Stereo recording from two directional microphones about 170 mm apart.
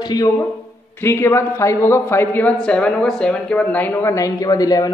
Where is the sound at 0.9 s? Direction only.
15° left (ahead or behind).